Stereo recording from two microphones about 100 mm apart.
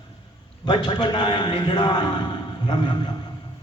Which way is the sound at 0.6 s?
45° left (ahead or behind).